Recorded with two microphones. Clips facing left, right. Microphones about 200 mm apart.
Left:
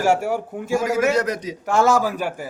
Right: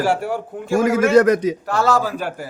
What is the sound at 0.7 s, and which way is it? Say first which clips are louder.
Speech: right 5 dB; 55° right (ahead or behind).